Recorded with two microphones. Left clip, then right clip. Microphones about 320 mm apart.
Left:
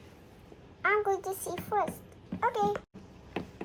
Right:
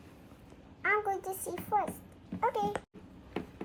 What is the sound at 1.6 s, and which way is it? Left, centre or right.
Speech, left.